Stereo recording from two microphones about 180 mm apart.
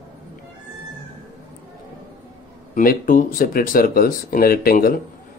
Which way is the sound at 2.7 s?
50° left (ahead or behind).